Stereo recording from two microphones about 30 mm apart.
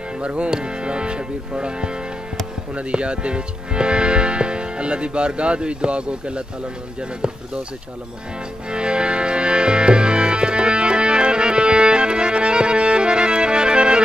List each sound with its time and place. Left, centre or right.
0.2 s speech: right
0.5 s speech: right
7.2 s speech: right
8.6 s music: right